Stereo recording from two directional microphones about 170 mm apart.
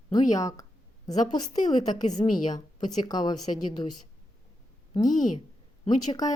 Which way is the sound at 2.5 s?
25° left (ahead or behind).